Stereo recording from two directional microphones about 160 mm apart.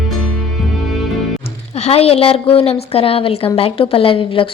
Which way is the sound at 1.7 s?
40° left (ahead or behind).